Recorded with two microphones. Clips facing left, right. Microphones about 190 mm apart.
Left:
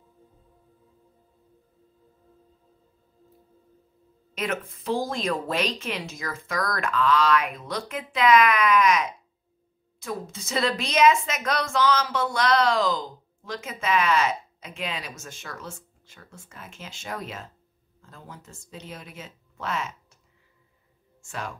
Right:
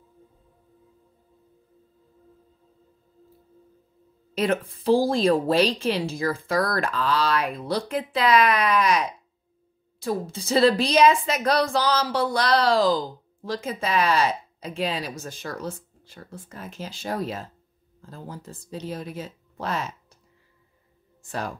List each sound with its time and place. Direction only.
4.4 s a woman's voice: 30° right (ahead or behind)
21.2 s speech: 35° right (ahead or behind)